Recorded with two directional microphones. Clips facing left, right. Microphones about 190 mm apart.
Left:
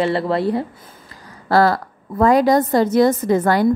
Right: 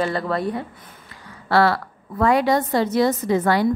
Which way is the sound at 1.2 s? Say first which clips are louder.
Left 3 dB; 40° left (ahead or behind).